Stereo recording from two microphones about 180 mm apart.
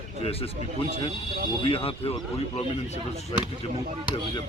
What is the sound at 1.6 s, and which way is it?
Speech, 30° left (ahead or behind).